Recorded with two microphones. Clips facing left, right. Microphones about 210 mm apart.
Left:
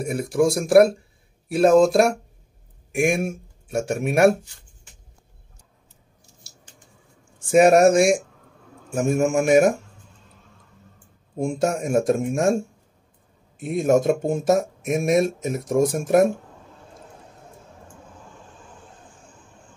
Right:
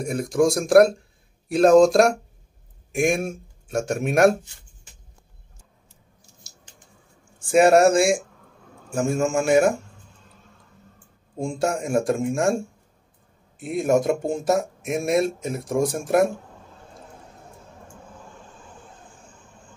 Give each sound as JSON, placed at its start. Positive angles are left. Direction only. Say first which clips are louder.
{"t": 0.0, "sound": "speech", "louder": "even", "side_deg": 5}
{"t": 7.4, "sound": "speech", "louder": "left 1 dB", "side_deg": 20}
{"t": 11.3, "sound": "speech", "louder": "left 2 dB", "side_deg": 20}
{"t": 13.6, "sound": "speech", "louder": "left 2 dB", "side_deg": 20}